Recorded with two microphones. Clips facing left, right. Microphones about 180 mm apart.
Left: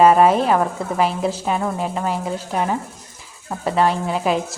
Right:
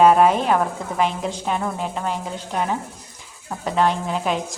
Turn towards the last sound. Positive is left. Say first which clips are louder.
# left 3 dB
turn(degrees=5)  # may be behind; listen again after turning